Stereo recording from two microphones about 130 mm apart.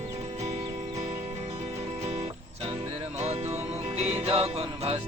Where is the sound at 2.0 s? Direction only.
50° right (ahead or behind).